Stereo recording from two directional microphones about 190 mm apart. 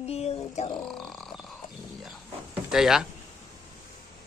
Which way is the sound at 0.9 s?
Centre (ahead or behind).